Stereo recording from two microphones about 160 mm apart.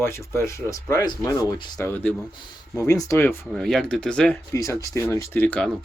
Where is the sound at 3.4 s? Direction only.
Centre (ahead or behind).